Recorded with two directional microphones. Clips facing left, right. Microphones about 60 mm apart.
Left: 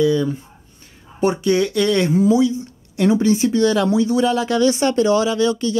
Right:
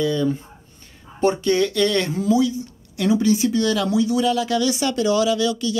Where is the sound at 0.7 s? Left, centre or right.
Centre.